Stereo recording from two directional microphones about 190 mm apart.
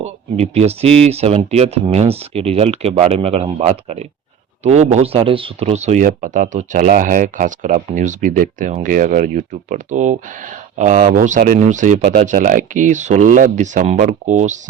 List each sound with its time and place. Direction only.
0.0 s speech: 35° right (ahead or behind)